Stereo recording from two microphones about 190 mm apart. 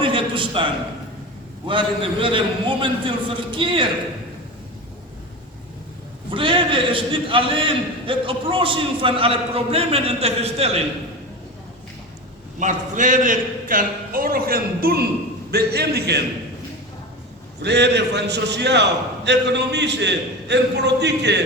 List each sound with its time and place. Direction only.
0.0 s a sound: 25° right (ahead or behind)
1.6 s a man's voice: 25° right (ahead or behind)
6.3 s a man's voice: 25° right (ahead or behind)
12.5 s a man's voice: 40° right (ahead or behind); by 16.2 s 60° right (ahead or behind)
17.6 s a man's voice: 65° right (ahead or behind)